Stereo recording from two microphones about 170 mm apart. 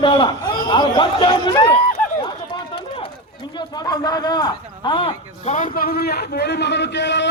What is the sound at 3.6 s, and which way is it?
A man's voice, 25° left (ahead or behind).